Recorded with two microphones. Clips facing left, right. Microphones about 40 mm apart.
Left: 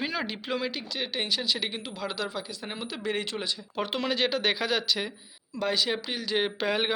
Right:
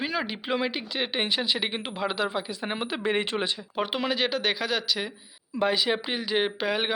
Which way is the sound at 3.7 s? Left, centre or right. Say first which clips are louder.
Even; centre.